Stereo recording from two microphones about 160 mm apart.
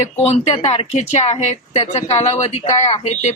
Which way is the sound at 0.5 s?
35° left (ahead or behind).